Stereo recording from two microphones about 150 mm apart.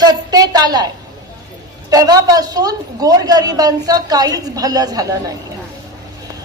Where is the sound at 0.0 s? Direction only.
25° right (ahead or behind).